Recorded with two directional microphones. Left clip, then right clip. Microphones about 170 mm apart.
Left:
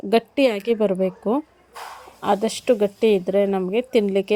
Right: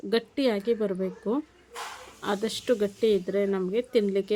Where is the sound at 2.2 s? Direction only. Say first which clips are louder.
Left 8 dB; 35° left (ahead or behind).